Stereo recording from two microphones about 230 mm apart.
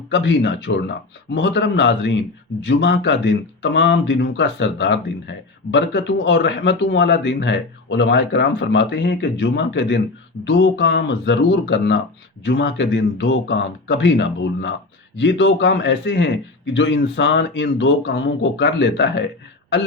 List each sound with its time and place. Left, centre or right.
0.1 s a man's voice: left